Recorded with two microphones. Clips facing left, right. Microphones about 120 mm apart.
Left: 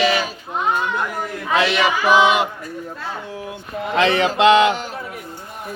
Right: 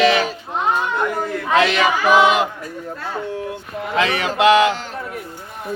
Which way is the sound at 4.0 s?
25° left (ahead or behind).